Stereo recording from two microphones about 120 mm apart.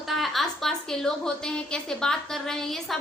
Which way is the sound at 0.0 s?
Centre (ahead or behind).